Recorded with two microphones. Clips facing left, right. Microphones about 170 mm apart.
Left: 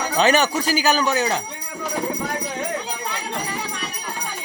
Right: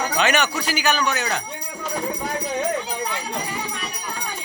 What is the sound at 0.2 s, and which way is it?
A man's voice, 35° left (ahead or behind).